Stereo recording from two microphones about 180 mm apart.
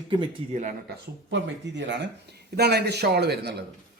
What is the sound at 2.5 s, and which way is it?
Speech, 65° right (ahead or behind).